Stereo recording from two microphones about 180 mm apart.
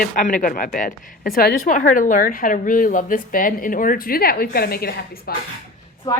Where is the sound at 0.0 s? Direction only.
50° left (ahead or behind).